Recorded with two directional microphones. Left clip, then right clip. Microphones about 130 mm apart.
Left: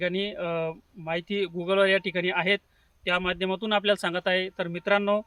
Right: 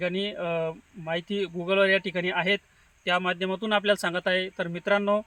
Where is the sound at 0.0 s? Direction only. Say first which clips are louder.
Even; 30° left (ahead or behind).